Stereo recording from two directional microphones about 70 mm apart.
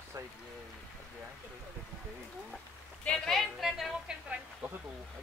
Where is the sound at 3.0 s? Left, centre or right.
Centre.